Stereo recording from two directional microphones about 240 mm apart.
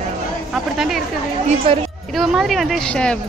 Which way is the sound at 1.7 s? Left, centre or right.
Right.